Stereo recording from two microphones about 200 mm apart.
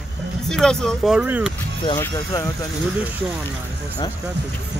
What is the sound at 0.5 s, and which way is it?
Speech, 5° left (ahead or behind).